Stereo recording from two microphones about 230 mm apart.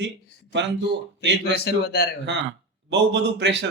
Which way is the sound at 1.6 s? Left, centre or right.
Left.